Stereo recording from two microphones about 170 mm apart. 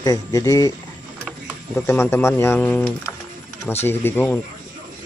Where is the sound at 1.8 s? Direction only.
15° left (ahead or behind).